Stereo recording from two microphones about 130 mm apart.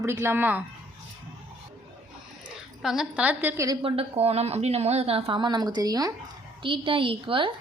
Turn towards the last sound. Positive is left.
turn(degrees=-40)  # may be behind; listen again after turning